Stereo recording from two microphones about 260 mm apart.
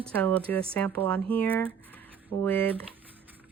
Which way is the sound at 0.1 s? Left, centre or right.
Centre.